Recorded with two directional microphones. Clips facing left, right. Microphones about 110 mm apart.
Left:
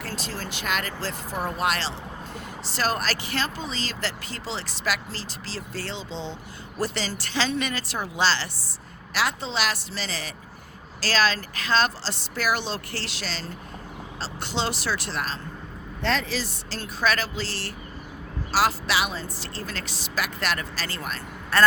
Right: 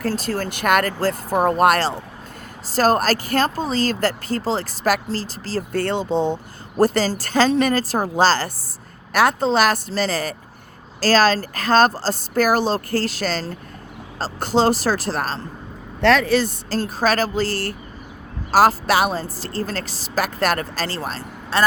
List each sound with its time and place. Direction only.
0.0 s a woman's voice: 45° right (ahead or behind)
16.0 s a woman's voice: 70° right (ahead or behind); by 21.2 s 35° right (ahead or behind)
21.5 s speech: 20° right (ahead or behind)